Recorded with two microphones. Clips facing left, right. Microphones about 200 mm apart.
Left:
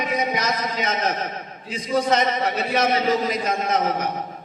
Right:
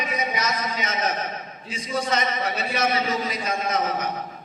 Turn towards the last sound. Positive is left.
turn(degrees=55)  # may be behind; listen again after turning